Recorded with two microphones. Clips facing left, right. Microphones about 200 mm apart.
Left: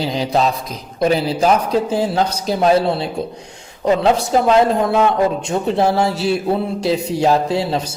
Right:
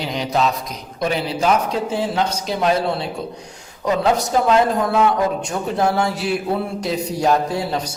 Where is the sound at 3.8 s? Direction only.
30° left (ahead or behind).